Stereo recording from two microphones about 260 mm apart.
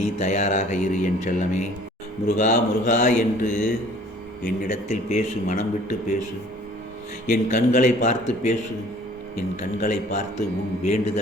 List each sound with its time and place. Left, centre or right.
0.2 s a man's voice: left
7.3 s a man's voice: left
9.6 s a man's voice: left